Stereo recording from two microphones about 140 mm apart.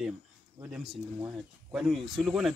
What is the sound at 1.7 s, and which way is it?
Speech, centre (ahead or behind).